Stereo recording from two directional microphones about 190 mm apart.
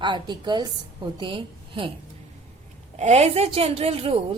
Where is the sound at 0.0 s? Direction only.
25° right (ahead or behind).